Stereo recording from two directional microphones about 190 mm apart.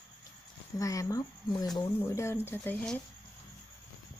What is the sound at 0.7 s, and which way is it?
Speech, 15° left (ahead or behind).